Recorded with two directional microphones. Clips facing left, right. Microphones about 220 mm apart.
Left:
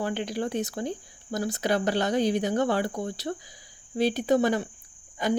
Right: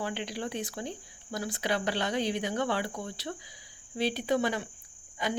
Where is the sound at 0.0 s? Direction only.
45° left (ahead or behind).